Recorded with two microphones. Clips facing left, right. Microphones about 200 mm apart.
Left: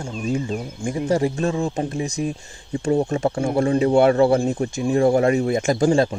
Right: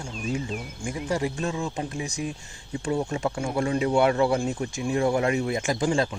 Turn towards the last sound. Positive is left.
turn(degrees=40)  # may be behind; listen again after turning